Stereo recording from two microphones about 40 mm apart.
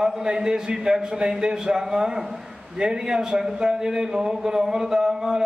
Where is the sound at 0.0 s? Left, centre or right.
Centre.